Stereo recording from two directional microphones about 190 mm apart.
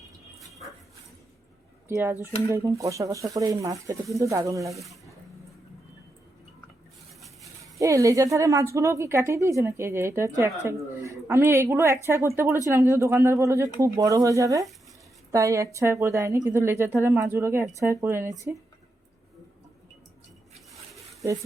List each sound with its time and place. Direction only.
0.4 s dog: centre (ahead or behind)
1.9 s a woman's voice: 10° right (ahead or behind)
4.7 s speech: centre (ahead or behind)
7.2 s a sound: centre (ahead or behind)
7.8 s a woman's voice: 15° right (ahead or behind)